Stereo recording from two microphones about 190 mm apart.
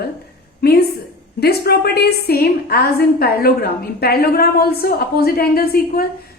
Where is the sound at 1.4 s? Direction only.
55° left (ahead or behind).